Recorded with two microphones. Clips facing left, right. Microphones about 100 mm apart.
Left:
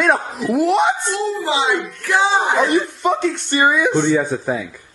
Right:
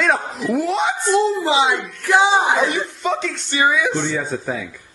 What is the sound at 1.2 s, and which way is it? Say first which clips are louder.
Speech: right 3 dB; 15° right (ahead or behind).